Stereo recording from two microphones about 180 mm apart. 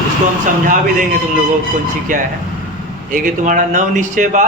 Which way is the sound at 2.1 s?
45° right (ahead or behind).